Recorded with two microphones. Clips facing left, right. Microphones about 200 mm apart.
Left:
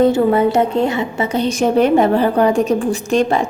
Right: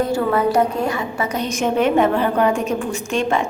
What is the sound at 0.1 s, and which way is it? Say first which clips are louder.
A woman's voice: left 4 dB; 25° left (ahead or behind).